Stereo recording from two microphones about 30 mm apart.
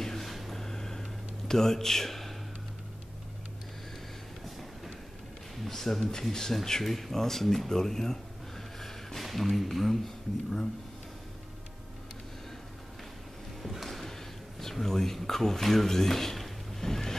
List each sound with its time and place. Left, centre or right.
0.0 s a sound: centre
0.6 s vehicle: centre
1.5 s speech: centre
5.7 s speech: centre
13.6 s music: centre
13.8 s a sound: centre
14.6 s speech: centre